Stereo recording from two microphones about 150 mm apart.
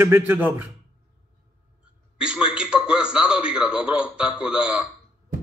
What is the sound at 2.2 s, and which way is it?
A man's voice, 5° right (ahead or behind).